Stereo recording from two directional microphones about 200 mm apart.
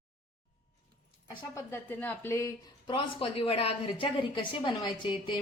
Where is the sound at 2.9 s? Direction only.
30° left (ahead or behind).